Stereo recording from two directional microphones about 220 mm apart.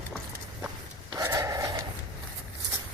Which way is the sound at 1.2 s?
15° right (ahead or behind).